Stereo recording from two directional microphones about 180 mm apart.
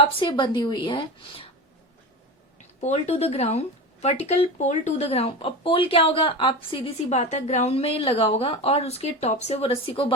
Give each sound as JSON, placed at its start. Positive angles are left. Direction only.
{"t": 0.0, "sound": "a woman's voice", "side_deg": 30}
{"t": 2.8, "sound": "speech", "side_deg": 40}